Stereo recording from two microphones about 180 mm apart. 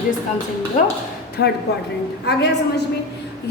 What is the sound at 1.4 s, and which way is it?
Speech, 65° left (ahead or behind).